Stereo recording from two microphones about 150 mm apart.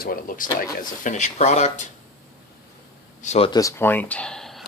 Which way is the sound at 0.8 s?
55° left (ahead or behind).